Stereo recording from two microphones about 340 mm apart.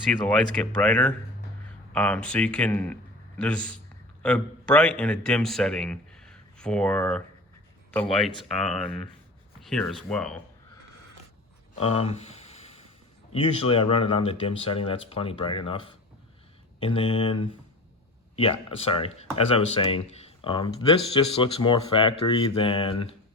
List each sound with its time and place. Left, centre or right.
0.1 s a man's voice: centre
9.6 s speech: centre
11.8 s speech: centre